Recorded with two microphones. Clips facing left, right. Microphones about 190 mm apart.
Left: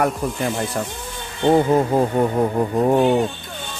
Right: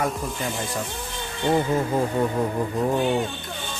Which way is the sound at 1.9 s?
70° left (ahead or behind).